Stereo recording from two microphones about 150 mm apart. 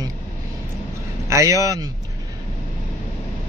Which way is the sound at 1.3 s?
20° right (ahead or behind).